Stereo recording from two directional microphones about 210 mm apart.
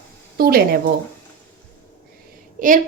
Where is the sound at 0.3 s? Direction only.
45° right (ahead or behind).